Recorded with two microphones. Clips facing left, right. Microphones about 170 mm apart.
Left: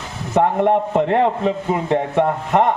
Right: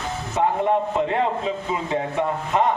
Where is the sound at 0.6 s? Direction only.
60° left (ahead or behind).